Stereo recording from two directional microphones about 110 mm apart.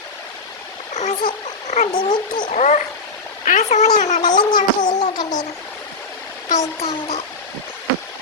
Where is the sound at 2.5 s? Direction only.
90° left.